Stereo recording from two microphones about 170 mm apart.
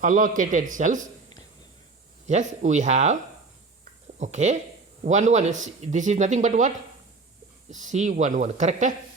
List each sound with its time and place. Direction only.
0.0 s speech: 50° right (ahead or behind)
2.2 s speech: 45° right (ahead or behind)
4.2 s speech: 45° right (ahead or behind)